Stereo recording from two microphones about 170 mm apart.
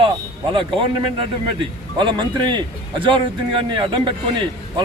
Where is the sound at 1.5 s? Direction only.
30° right (ahead or behind).